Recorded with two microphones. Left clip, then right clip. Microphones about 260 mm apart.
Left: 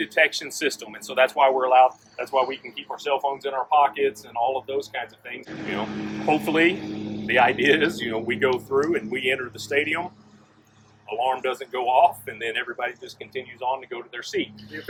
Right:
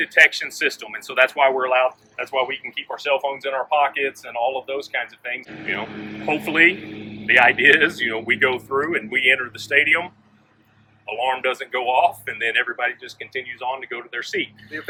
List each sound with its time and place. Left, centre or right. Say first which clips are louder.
0.0 s speech: right 6 dB; centre
5.9 s speech: left 2 dB; left
6.2 s speech: right 4 dB; centre
6.8 s a sound: left 2 dB; left
7.3 s speech: right 5 dB; centre